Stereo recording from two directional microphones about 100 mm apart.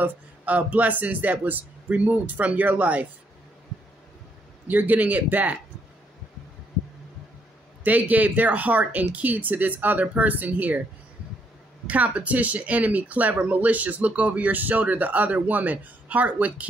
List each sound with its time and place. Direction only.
0.0 s speech: 15° right (ahead or behind)
4.6 s speech: 15° right (ahead or behind)
7.8 s speech: 15° right (ahead or behind)
11.9 s speech: 15° right (ahead or behind)